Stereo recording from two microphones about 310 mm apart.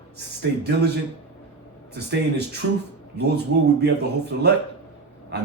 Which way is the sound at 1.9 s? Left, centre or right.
Right.